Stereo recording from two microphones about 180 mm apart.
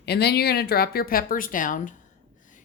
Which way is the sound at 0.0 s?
65° left (ahead or behind).